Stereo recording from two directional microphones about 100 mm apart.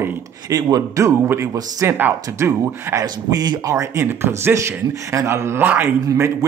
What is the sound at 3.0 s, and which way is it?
Speech, 45° right (ahead or behind).